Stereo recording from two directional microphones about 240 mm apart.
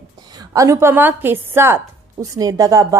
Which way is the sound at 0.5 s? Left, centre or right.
Centre.